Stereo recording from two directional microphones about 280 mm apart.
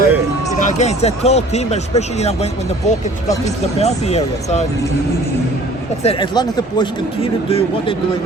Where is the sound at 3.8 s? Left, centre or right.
Left.